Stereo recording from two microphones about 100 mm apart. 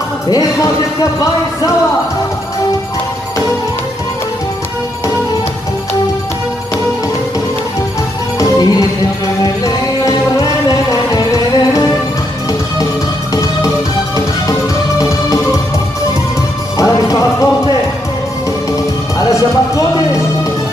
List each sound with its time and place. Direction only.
0.3 s speech: 35° left (ahead or behind)
8.4 s music: 40° left (ahead or behind)
10.0 s music: 35° left (ahead or behind)
13.3 s music: 35° left (ahead or behind)
15.0 s music: 35° left (ahead or behind)
16.7 s music: 35° left (ahead or behind)